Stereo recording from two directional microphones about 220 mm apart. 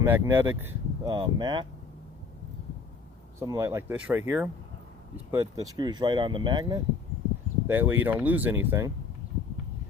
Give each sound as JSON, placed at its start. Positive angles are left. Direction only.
{"t": 0.0, "sound": "speech", "side_deg": -10}
{"t": 3.4, "sound": "speech", "side_deg": -15}
{"t": 7.7, "sound": "speech", "side_deg": -10}